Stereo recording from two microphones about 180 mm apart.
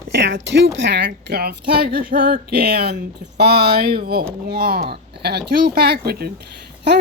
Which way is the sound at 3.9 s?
55° right (ahead or behind).